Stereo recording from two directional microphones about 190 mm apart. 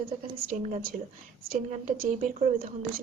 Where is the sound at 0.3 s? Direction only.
45° right (ahead or behind).